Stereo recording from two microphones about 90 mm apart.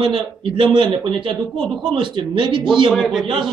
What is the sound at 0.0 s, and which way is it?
A man's voice, 70° right (ahead or behind).